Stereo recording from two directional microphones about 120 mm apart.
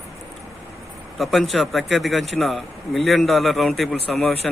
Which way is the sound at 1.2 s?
Centre (ahead or behind).